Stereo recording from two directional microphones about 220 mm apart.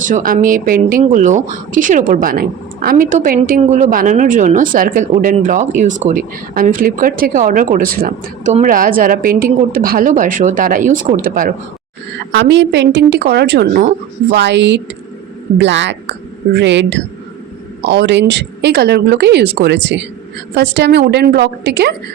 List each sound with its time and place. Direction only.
0.0 s speech: 40° right (ahead or behind)
12.3 s a woman's voice: 55° right (ahead or behind)